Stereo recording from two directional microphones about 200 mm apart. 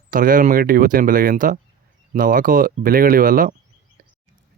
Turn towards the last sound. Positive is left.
turn(degrees=-45)  # may be behind; listen again after turning